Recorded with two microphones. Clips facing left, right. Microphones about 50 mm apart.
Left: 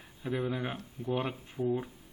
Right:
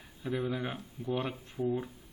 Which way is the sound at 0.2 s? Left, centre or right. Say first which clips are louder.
Even; centre.